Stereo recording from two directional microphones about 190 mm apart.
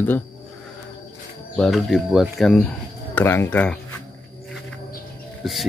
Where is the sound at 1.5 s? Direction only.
Centre (ahead or behind).